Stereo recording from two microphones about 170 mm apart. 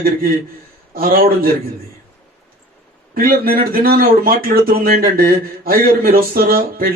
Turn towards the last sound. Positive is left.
turn(degrees=-60)  # may be behind; listen again after turning